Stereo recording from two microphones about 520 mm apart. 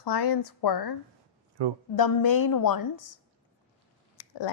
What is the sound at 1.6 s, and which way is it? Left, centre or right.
Speech, right.